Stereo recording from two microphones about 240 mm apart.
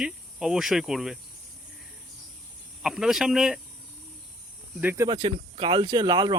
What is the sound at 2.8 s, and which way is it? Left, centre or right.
Cricket, centre.